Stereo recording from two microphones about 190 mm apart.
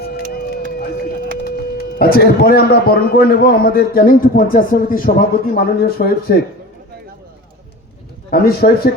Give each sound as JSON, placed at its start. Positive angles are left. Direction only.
{"t": 0.0, "sound": "speech", "side_deg": 60}
{"t": 8.3, "sound": "a man's voice", "side_deg": 55}